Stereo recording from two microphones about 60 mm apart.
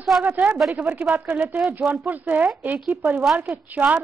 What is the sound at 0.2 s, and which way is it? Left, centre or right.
Speech, right.